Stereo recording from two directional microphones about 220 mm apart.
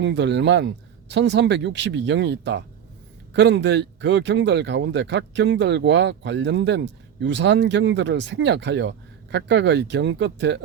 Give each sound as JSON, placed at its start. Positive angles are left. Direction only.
{"t": 0.0, "sound": "speech", "side_deg": -55}